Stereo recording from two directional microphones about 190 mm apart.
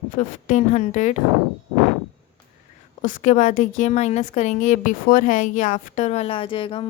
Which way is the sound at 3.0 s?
40° left (ahead or behind).